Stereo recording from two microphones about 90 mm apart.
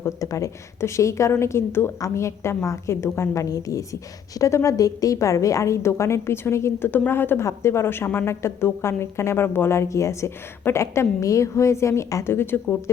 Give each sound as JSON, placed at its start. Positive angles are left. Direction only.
{"t": 0.0, "sound": "a woman's voice", "side_deg": 35}